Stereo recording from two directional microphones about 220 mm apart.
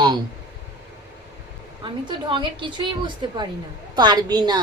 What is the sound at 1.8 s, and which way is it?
A woman's voice, 20° right (ahead or behind).